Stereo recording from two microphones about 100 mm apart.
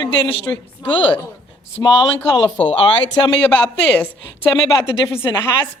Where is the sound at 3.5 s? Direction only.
15° left (ahead or behind).